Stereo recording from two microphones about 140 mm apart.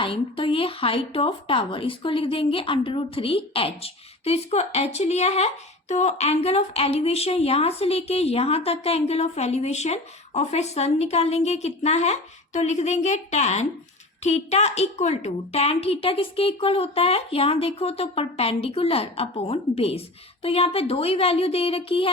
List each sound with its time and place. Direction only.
0.0 s a woman's voice: 40° left (ahead or behind)